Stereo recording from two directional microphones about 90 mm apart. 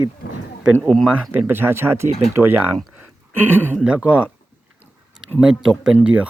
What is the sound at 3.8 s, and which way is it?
Speech, 15° right (ahead or behind).